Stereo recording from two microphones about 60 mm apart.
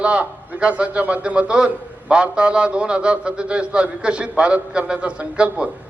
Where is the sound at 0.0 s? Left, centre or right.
Centre.